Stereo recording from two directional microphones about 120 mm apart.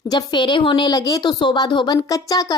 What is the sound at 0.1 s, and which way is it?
A woman's voice, 35° left (ahead or behind).